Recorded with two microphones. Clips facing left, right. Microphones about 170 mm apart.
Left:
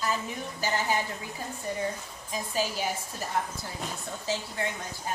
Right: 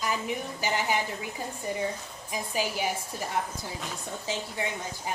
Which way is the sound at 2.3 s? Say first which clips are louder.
Even; 15° right (ahead or behind).